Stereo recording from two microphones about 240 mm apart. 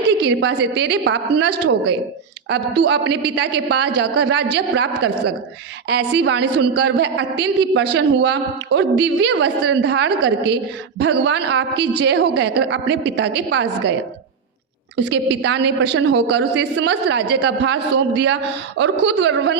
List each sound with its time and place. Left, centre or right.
0.2 s a woman's voice: right
6.1 s a woman's voice: right
14.9 s a woman's voice: right